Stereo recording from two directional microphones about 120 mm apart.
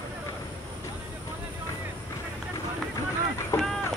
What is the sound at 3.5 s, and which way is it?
Vehicle, 25° left (ahead or behind).